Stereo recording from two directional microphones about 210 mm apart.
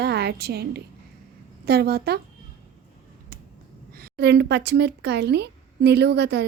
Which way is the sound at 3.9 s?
50° right (ahead or behind).